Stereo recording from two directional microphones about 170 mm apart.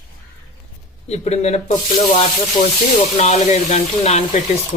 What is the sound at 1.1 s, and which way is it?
Speech, 40° left (ahead or behind).